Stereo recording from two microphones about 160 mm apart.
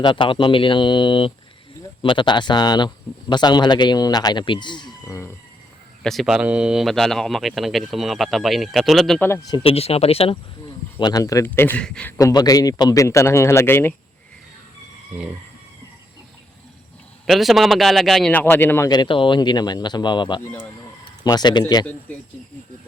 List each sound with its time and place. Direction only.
0.0 s speech: 30° left (ahead or behind)
6.0 s speech: centre (ahead or behind)
9.2 s speech: 15° left (ahead or behind)
9.6 s speech: 40° left (ahead or behind)
10.9 s speech: 20° left (ahead or behind); by 12.1 s 5° left (ahead or behind)
12.1 s speech: 25° left (ahead or behind)
17.2 s speech: centre (ahead or behind)
18.9 s speech: 30° left (ahead or behind)